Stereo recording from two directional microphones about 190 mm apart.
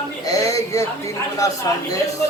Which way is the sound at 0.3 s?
15° left (ahead or behind).